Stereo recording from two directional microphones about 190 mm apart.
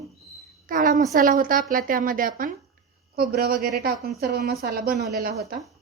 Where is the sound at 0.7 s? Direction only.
45° right (ahead or behind).